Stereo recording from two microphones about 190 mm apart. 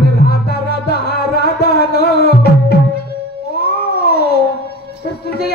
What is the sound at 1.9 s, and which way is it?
Music, 60° left (ahead or behind).